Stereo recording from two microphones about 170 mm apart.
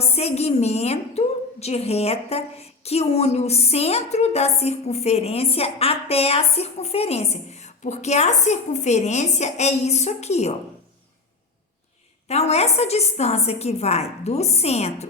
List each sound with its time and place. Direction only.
0.0 s a woman's voice: 35° left (ahead or behind)
12.3 s a woman's voice: 40° left (ahead or behind)